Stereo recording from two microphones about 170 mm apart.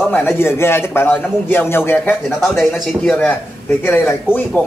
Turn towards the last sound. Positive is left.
turn(degrees=15)  # may be behind; listen again after turning